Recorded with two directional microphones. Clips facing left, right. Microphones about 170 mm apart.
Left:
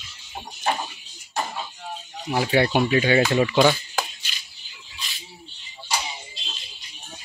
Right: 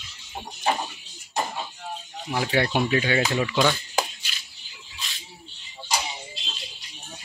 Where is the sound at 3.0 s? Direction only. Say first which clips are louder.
Left 5 dB; 30° left (ahead or behind).